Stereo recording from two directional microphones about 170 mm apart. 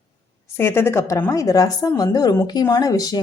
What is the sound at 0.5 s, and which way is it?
A woman's voice, 15° left (ahead or behind).